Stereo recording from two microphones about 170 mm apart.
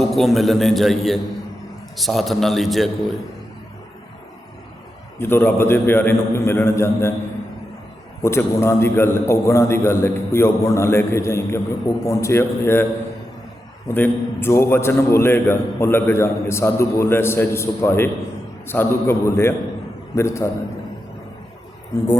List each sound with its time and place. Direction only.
0.1 s a man's voice: centre (ahead or behind)
5.2 s a man's voice: 10° left (ahead or behind)
8.2 s a man's voice: 15° left (ahead or behind)